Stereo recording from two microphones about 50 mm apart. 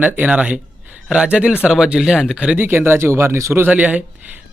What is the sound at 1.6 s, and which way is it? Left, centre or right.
Speech, centre.